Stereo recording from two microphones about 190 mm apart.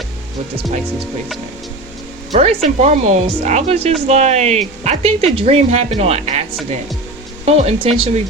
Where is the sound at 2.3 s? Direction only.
35° right (ahead or behind).